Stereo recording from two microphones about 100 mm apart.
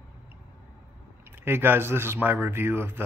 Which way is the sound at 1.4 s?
20° right (ahead or behind).